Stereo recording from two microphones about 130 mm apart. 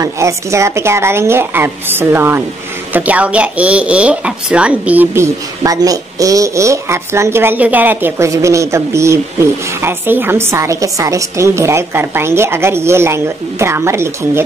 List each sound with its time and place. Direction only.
0.0 s speech: 20° right (ahead or behind)